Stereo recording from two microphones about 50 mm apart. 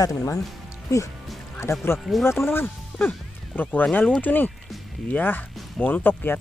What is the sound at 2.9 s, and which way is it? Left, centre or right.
Speech, centre.